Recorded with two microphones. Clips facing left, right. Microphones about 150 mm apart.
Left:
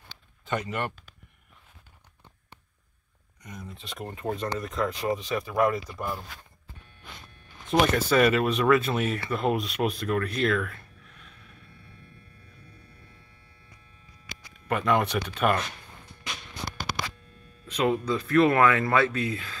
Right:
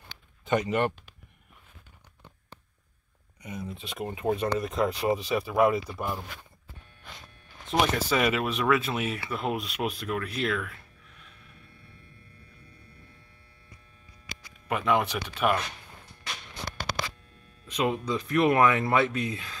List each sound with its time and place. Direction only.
0.5 s speech: 20° right (ahead or behind)
3.4 s speech: 5° right (ahead or behind)
7.9 s speech: 5° right (ahead or behind)
14.7 s speech: 5° right (ahead or behind)
17.6 s speech: 15° right (ahead or behind)